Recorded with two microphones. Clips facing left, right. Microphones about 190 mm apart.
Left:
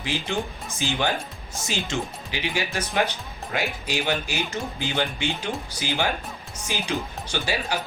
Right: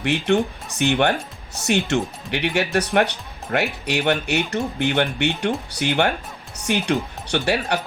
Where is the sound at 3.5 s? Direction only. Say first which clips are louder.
Right 5 dB; 55° right (ahead or behind).